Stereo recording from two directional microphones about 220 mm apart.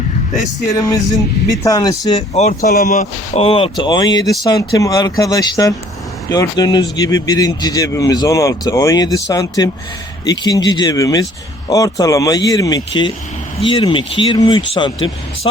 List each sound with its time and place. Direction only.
0.8 s speech: 15° left (ahead or behind)
2.3 s speech: 30° left (ahead or behind)